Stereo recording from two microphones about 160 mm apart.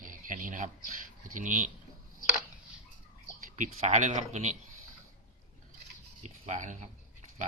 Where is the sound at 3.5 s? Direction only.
50° right (ahead or behind).